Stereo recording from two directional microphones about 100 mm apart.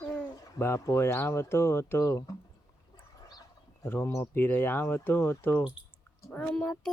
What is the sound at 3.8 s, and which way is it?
Speech, 25° left (ahead or behind).